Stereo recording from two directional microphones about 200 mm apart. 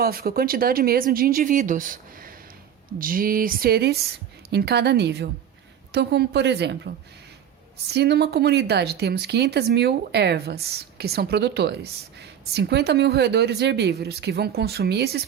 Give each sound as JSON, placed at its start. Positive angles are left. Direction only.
{"t": 0.0, "sound": "speech", "side_deg": -50}